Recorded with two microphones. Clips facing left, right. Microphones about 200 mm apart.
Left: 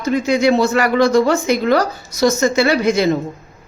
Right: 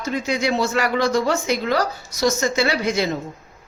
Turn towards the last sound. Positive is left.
turn(degrees=55)  # may be behind; listen again after turning